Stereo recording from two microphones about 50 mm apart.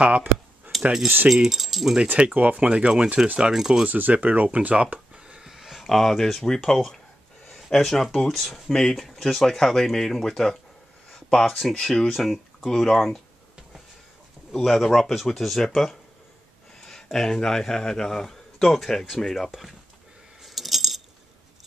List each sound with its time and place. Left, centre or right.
1.0 s speech: right
1.3 s a man's voice: centre
2.1 s speech: right; by 3.8 s centre
3.8 s speech: right
4.6 s a sound: right; by 5.9 s centre
5.9 s a man's voice: centre
14.5 s a man's voice: centre
20.4 s coin: centre